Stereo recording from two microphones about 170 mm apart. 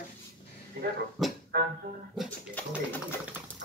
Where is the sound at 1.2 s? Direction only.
Centre (ahead or behind).